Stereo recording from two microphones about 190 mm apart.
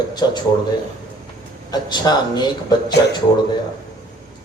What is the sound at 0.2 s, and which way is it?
Speech, 20° left (ahead or behind).